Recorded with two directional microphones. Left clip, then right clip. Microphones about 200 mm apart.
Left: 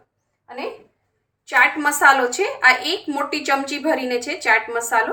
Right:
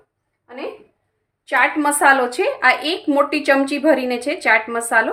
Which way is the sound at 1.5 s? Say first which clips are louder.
Even; 45° right (ahead or behind).